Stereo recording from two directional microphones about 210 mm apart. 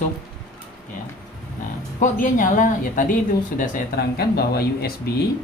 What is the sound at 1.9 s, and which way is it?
Speech, 40° left (ahead or behind).